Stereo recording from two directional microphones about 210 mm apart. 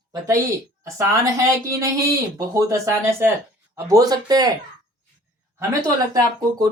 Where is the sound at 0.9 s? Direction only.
15° right (ahead or behind).